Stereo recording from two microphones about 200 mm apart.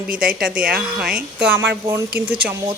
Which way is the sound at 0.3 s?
5° right (ahead or behind).